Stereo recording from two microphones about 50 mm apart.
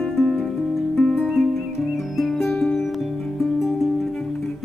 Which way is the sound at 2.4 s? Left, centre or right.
Centre.